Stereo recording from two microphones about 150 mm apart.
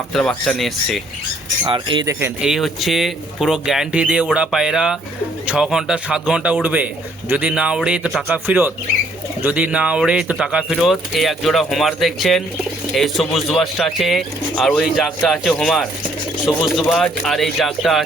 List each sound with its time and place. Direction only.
0.1 s speech: 5° left (ahead or behind)
1.6 s speech: 30° right (ahead or behind)
2.4 s speech: centre (ahead or behind)